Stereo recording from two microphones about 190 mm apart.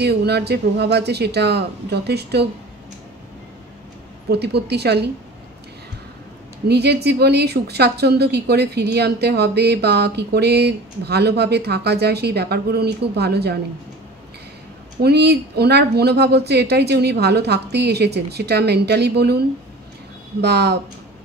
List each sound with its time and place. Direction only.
0.0 s a woman's voice: 60° right (ahead or behind)
4.3 s a woman's voice: 60° right (ahead or behind)
6.7 s a woman's voice: 60° right (ahead or behind)
15.0 s a woman's voice: 60° right (ahead or behind)